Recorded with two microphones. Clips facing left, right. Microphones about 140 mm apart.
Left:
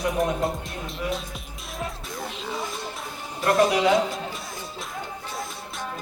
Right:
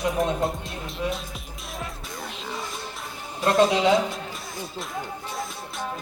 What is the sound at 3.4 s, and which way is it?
Speech, 25° right (ahead or behind).